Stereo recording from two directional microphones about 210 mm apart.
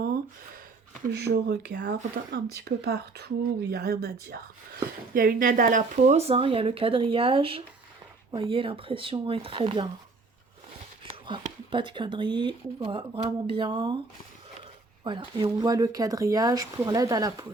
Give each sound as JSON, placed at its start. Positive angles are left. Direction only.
{"t": 1.3, "sound": "speech", "side_deg": -50}
{"t": 11.0, "sound": "speech", "side_deg": -25}
{"t": 15.0, "sound": "speech", "side_deg": -25}